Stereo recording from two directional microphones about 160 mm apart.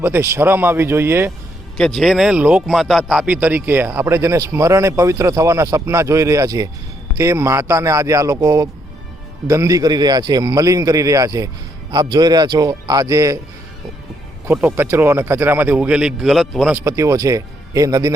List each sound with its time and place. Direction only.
0.0 s speech: 15° right (ahead or behind)
1.8 s a man's voice: centre (ahead or behind); by 13.4 s 20° right (ahead or behind)
14.4 s speech: 10° right (ahead or behind)
16.7 s a man's voice: 20° right (ahead or behind)